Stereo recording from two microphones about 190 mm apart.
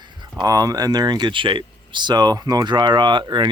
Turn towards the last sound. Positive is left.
turn(degrees=-25)  # may be behind; listen again after turning